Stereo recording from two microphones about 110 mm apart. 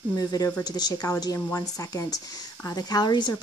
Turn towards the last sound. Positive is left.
turn(degrees=40)  # may be behind; listen again after turning